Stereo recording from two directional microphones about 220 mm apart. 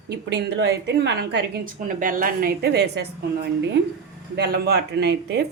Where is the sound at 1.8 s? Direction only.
40° right (ahead or behind).